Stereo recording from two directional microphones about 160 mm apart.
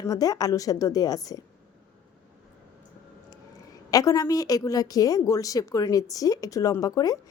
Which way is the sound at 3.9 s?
20° left (ahead or behind).